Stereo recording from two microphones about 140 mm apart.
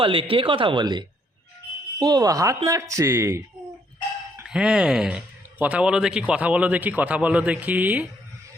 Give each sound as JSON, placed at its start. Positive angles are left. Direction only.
{"t": 0.0, "sound": "speech", "side_deg": -40}
{"t": 4.4, "sound": "speech", "side_deg": -5}